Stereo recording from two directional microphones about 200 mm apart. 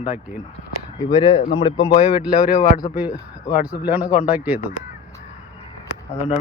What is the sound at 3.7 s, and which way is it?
Speech, 10° right (ahead or behind).